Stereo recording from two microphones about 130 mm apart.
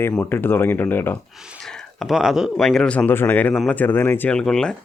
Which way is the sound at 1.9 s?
Centre (ahead or behind).